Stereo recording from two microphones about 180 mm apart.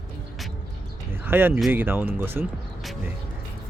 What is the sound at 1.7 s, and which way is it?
Speech, 10° right (ahead or behind).